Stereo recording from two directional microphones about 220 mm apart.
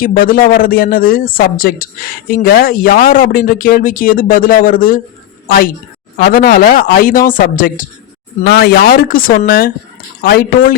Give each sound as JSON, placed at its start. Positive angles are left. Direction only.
{"t": 0.0, "sound": "a woman's voice", "side_deg": 40}